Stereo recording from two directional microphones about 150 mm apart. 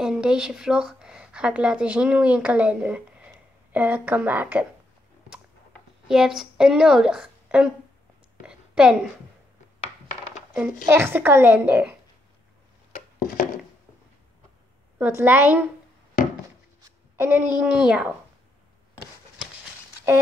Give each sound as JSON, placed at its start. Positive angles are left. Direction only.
{"t": 0.0, "sound": "a woman's voice", "side_deg": -5}
{"t": 6.0, "sound": "a woman's voice", "side_deg": 0}
{"t": 8.4, "sound": "a sound", "side_deg": -5}
{"t": 10.9, "sound": "a woman's voice", "side_deg": -15}
{"t": 12.9, "sound": "a sound", "side_deg": 60}
{"t": 15.0, "sound": "a woman's voice", "side_deg": -15}
{"t": 17.2, "sound": "a woman's voice", "side_deg": -10}